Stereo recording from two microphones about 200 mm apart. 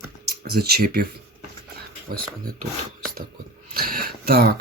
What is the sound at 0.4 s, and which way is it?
Speech, 50° right (ahead or behind).